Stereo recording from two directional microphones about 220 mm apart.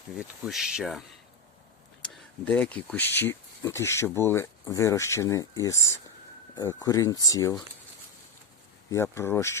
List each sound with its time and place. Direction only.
0.2 s speech: centre (ahead or behind); by 7.6 s 15° left (ahead or behind)
8.9 s speech: 10° left (ahead or behind)